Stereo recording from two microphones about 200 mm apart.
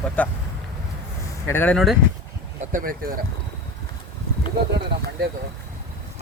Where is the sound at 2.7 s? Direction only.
45° right (ahead or behind).